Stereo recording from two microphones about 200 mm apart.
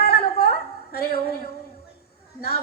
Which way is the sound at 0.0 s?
50° left (ahead or behind).